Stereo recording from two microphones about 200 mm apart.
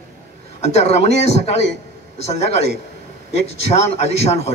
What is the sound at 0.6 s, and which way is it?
A man's voice, 30° left (ahead or behind).